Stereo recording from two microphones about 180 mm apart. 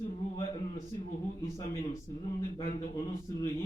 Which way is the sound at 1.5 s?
15° left (ahead or behind).